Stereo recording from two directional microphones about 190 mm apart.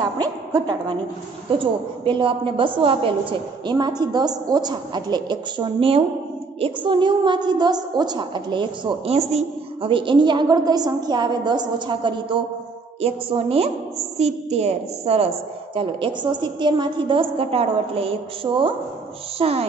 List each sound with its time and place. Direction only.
0.0 s a woman's voice: 20° right (ahead or behind)